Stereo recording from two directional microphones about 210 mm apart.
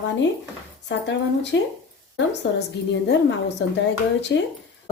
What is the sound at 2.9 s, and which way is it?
Speech, 55° left (ahead or behind).